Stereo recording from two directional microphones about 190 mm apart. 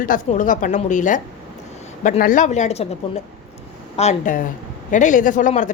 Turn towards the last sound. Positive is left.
turn(degrees=40)  # may be behind; listen again after turning